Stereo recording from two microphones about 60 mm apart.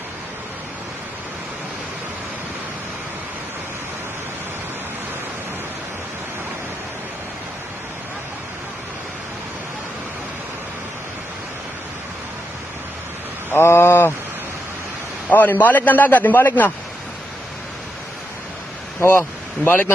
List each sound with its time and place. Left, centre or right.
13.5 s a sound: left
15.3 s a man's voice: left
18.9 s speech: left
19.6 s a man's voice: left